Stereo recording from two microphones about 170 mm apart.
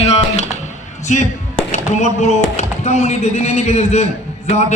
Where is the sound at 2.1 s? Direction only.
40° left (ahead or behind).